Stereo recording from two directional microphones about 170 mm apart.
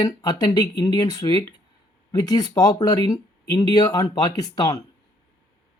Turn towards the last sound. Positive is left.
turn(degrees=20)  # may be behind; listen again after turning